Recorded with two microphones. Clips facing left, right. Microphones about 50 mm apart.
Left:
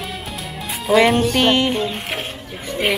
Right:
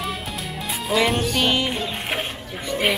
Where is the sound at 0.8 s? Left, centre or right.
Centre.